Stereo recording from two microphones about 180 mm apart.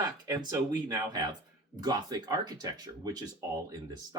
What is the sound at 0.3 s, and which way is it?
Speech, 20° right (ahead or behind).